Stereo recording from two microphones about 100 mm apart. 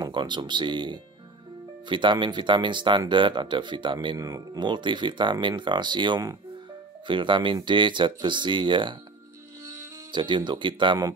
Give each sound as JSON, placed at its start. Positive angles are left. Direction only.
{"t": 0.0, "sound": "speech", "side_deg": -50}
{"t": 10.1, "sound": "speech", "side_deg": -50}